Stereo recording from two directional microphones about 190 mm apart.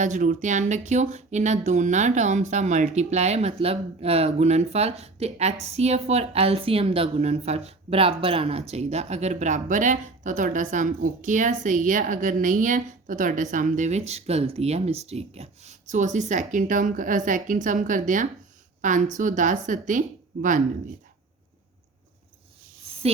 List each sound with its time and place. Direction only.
0.0 s a woman's voice: 40° right (ahead or behind)